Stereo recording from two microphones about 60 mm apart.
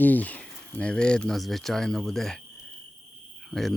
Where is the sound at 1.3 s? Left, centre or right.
Centre.